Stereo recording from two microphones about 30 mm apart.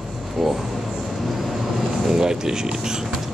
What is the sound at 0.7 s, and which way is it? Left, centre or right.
Vehicle, centre.